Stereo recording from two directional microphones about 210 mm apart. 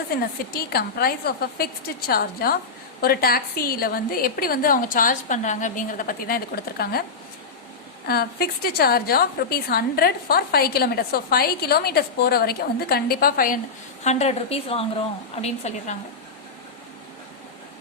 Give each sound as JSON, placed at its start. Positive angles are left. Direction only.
{"t": 0.2, "sound": "a woman's voice", "side_deg": 45}
{"t": 8.0, "sound": "a woman's voice", "side_deg": 50}
{"t": 14.0, "sound": "a woman's voice", "side_deg": 30}